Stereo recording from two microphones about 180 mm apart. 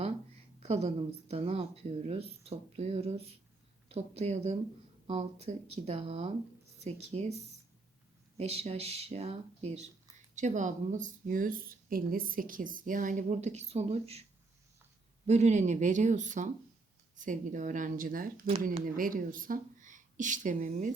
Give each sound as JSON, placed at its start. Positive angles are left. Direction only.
{"t": 0.6, "sound": "speech", "side_deg": -40}
{"t": 15.3, "sound": "speech", "side_deg": -40}